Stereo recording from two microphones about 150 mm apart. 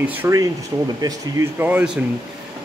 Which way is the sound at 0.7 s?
25° right (ahead or behind).